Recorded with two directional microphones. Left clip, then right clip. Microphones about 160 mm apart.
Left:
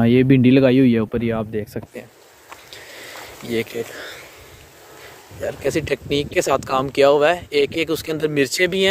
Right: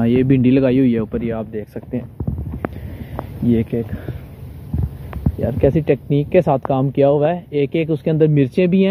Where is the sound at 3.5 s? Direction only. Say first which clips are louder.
Right 3 dB; 25° left (ahead or behind).